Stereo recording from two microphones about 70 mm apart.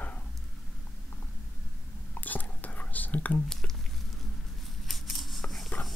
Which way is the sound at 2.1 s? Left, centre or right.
Left.